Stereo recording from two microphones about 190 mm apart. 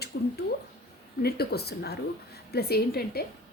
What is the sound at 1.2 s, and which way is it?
A woman's voice, 55° left (ahead or behind).